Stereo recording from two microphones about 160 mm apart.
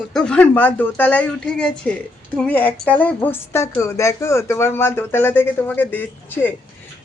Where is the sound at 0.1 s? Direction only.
5° left (ahead or behind).